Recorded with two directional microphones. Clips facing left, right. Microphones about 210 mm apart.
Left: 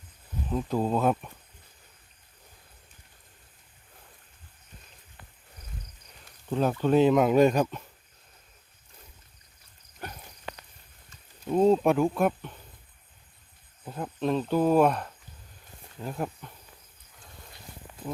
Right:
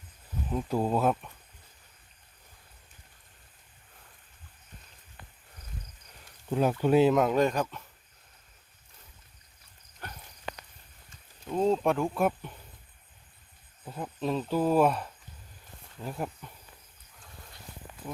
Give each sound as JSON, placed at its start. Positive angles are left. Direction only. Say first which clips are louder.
{"t": 0.5, "sound": "speech", "louder": "left 1 dB", "side_deg": -5}
{"t": 6.5, "sound": "speech", "louder": "even", "side_deg": -10}
{"t": 10.0, "sound": "clip-clop", "louder": "left 4 dB", "side_deg": 15}
{"t": 11.6, "sound": "speech", "louder": "left 4 dB", "side_deg": 10}
{"t": 12.1, "sound": "speech", "louder": "left 2 dB", "side_deg": -5}
{"t": 13.8, "sound": "speech", "louder": "left 3 dB", "side_deg": 5}